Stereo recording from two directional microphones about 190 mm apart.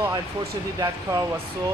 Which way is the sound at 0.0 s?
20° right (ahead or behind).